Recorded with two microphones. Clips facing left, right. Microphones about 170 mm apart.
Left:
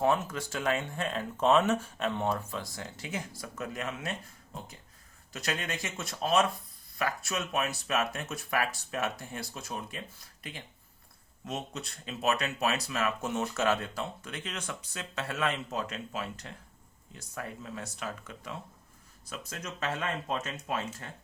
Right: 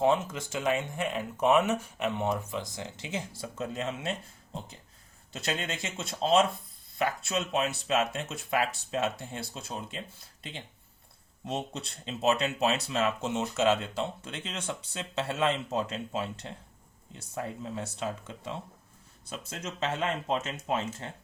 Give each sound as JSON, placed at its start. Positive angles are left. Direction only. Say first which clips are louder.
{"t": 0.0, "sound": "speech", "louder": "right 2 dB", "side_deg": -20}
{"t": 11.4, "sound": "speech", "louder": "right 3 dB", "side_deg": -30}